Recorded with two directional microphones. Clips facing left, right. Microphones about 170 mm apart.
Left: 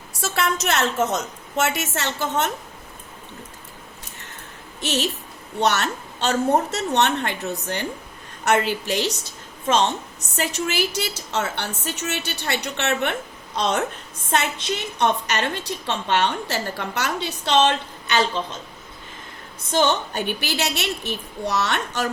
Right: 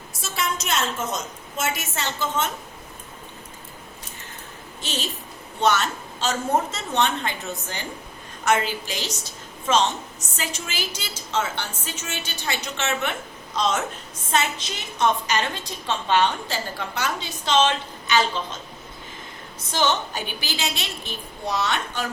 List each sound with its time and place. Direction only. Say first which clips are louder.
0.2 s a woman's voice: left 5 dB; 70° left (ahead or behind)
4.8 s a woman's voice: left 7 dB; 75° left (ahead or behind)
19.7 s a woman's voice: left 3 dB; 60° left (ahead or behind)
21.1 s a child's voice: left 3 dB; 80° left